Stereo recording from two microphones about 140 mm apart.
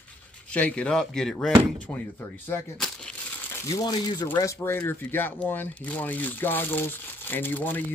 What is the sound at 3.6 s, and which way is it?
Speech, 25° left (ahead or behind).